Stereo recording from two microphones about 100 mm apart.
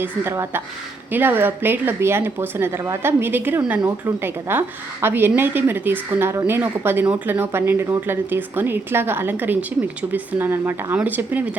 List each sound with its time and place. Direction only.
0.0 s speech: 25° right (ahead or behind)